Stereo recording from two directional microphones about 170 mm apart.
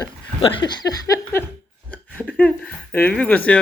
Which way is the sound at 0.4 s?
25° left (ahead or behind).